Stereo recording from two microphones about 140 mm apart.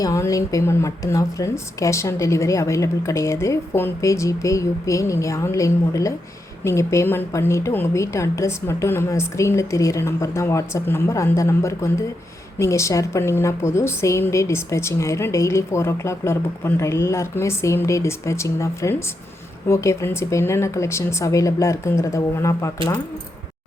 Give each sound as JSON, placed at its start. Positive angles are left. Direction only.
{"t": 0.0, "sound": "a woman's voice", "side_deg": 25}